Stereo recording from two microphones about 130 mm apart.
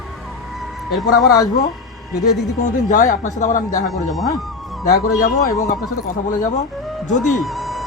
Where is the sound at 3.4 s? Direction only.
85° left.